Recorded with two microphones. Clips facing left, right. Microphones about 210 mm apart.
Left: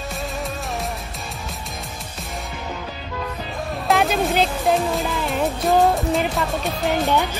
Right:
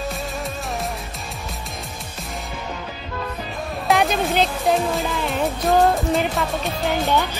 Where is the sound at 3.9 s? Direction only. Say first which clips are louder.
Even; centre (ahead or behind).